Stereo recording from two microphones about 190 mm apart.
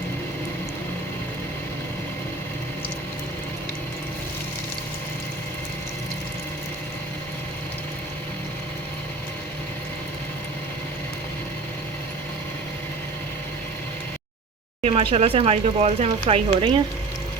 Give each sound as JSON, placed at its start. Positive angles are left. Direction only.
{"t": 14.8, "sound": "speech", "side_deg": -35}